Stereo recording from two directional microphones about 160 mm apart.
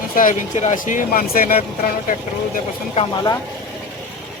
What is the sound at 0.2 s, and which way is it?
Speech, 55° left (ahead or behind).